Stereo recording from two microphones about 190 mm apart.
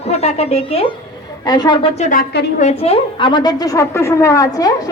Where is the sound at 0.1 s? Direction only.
35° left (ahead or behind).